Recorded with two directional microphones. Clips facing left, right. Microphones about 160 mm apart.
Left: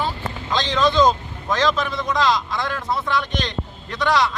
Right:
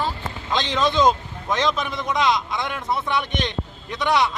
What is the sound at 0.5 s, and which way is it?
A man's voice, 20° right (ahead or behind).